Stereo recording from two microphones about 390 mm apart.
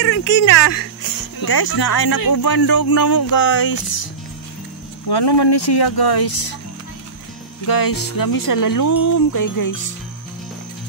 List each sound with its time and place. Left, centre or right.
0.0 s speech: left
1.4 s speech: left
5.0 s speech: left
7.6 s speech: left